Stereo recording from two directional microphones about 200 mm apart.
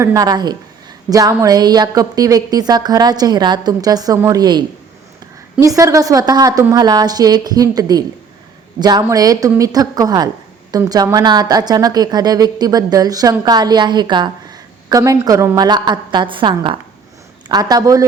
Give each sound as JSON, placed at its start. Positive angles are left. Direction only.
{"t": 0.0, "sound": "a woman's voice", "side_deg": -15}